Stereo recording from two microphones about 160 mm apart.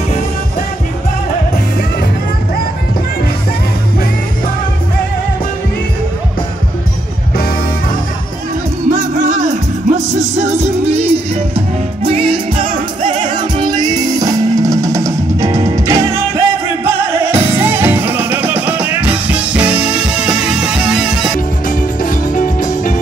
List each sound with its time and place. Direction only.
8.9 s music: 50° right (ahead or behind); by 21.4 s 5° right (ahead or behind)
21.6 s music: 60° left (ahead or behind)